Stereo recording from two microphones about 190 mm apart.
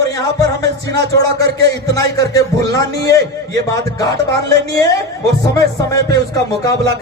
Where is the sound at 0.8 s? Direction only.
60° right (ahead or behind).